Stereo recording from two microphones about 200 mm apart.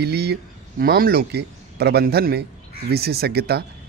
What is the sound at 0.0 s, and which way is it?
Speech, 55° right (ahead or behind).